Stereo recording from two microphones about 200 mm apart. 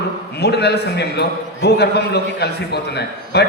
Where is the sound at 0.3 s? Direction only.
55° left (ahead or behind).